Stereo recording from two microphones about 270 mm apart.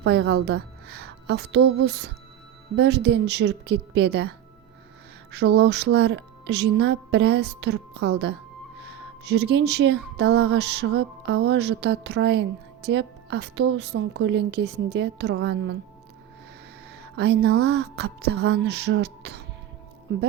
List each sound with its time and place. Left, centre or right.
0.0 s a woman's voice: right
17.0 s speech: right